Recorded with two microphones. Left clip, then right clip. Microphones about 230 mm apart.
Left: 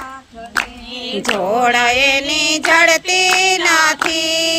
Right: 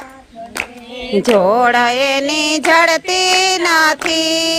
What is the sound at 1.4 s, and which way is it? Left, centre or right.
Female singing, right.